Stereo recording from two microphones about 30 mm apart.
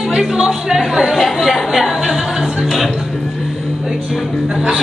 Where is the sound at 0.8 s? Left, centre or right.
Centre.